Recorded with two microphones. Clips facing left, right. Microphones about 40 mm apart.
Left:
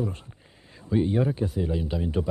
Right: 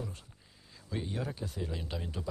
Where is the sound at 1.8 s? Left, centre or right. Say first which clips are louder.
Left 11 dB; centre.